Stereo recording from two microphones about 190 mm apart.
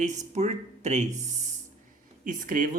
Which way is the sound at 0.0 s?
40° right (ahead or behind).